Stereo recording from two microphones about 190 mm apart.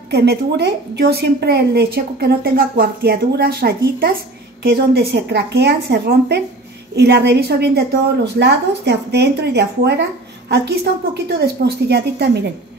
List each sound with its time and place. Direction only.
0.1 s a woman's voice: 60° right (ahead or behind)